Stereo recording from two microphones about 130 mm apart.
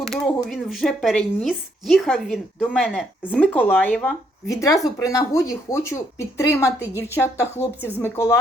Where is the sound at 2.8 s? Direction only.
5° right (ahead or behind).